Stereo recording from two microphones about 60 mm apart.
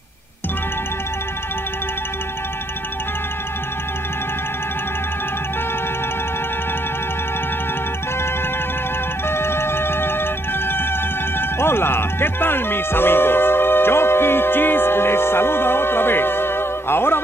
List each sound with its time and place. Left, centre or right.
9.3 s music: left
11.3 s music: left